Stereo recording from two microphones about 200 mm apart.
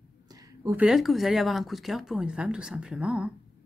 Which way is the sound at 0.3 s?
15° right (ahead or behind).